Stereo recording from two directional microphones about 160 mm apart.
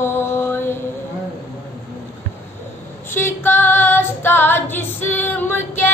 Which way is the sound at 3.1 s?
15° left (ahead or behind).